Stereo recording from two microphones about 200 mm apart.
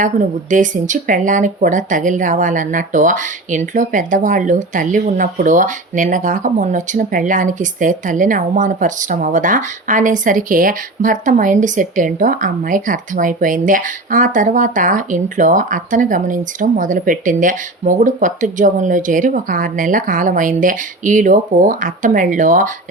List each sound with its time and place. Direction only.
0.0 s speech: 40° right (ahead or behind)